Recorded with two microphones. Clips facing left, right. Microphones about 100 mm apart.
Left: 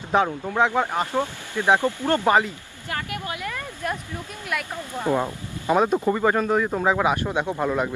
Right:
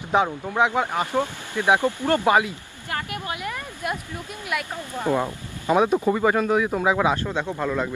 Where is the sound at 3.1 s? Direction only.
25° right (ahead or behind).